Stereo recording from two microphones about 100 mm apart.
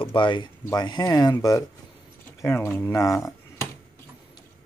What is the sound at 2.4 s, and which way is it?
Speech, 20° left (ahead or behind).